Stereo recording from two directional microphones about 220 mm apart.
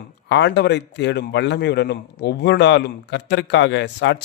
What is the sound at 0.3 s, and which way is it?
A man's voice, 50° left (ahead or behind).